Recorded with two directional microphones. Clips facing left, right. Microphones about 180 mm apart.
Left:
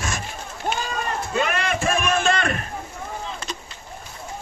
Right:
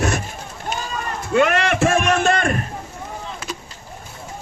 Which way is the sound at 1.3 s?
70° right (ahead or behind).